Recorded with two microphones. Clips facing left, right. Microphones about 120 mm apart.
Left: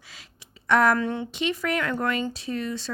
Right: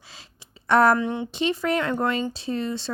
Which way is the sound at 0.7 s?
35° right (ahead or behind).